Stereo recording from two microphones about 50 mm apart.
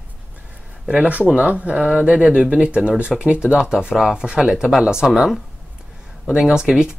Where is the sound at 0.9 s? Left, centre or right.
Right; by 4.2 s centre.